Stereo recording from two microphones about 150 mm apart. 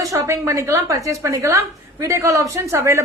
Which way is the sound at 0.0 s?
20° right (ahead or behind).